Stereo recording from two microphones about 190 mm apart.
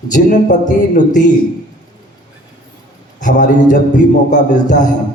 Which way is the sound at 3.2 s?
40° left (ahead or behind).